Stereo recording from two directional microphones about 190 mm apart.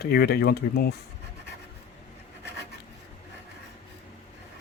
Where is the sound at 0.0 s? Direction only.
55° left (ahead or behind).